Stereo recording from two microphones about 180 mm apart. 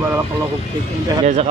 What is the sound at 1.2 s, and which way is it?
Speech, 40° right (ahead or behind).